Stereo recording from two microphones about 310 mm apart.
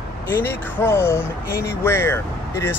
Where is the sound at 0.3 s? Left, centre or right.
Centre.